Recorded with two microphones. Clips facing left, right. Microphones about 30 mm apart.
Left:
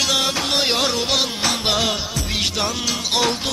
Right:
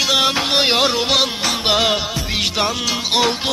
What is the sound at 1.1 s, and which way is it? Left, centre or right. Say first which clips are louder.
Music: right 3 dB; centre.